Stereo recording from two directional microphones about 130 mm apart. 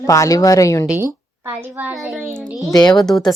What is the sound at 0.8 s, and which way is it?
A child's voice, 15° right (ahead or behind).